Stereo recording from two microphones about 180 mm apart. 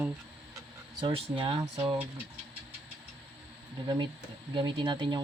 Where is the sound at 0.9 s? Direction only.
25° right (ahead or behind).